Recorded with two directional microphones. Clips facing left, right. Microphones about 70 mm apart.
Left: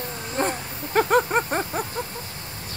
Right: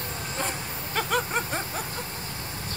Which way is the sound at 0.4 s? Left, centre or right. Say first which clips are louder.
Left 8 dB; left.